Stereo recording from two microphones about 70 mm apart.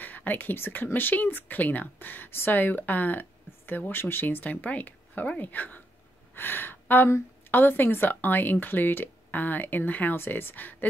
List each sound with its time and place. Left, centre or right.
0.0 s speech: left